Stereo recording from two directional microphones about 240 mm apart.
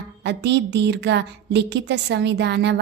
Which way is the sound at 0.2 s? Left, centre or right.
Right.